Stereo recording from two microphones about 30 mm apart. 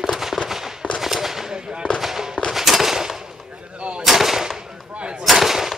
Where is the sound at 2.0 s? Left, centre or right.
Centre.